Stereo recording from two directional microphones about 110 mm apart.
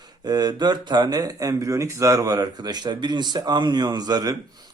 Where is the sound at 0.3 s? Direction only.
35° right (ahead or behind).